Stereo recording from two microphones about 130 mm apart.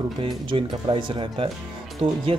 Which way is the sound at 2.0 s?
50° right (ahead or behind).